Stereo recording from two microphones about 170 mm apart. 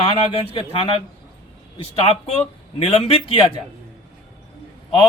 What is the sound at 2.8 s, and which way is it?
Speech, 30° left (ahead or behind).